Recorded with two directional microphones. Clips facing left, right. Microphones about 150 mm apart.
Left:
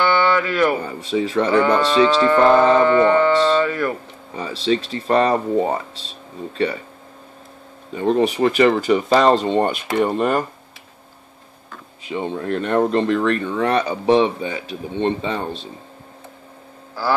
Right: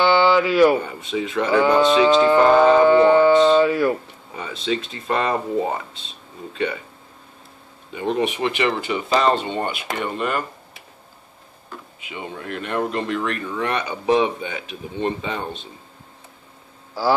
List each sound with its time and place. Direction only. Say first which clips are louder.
0.2 s speech: right 3 dB; 10° right (ahead or behind)
0.8 s speech: left 4 dB; 35° left (ahead or behind)
1.5 s speech: right 3 dB; 10° right (ahead or behind)
4.4 s speech: left 4 dB; 35° left (ahead or behind)
7.9 s speech: left 4 dB; 35° left (ahead or behind)
12.0 s speech: left 9 dB; 35° left (ahead or behind)